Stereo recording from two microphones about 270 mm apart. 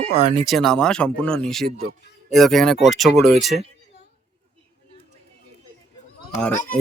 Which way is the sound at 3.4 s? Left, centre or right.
Right.